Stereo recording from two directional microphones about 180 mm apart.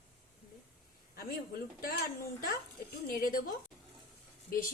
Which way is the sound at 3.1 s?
50° left (ahead or behind).